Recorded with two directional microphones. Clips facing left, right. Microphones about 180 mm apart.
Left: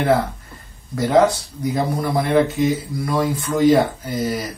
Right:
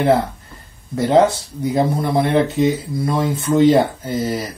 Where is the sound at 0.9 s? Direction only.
25° right (ahead or behind).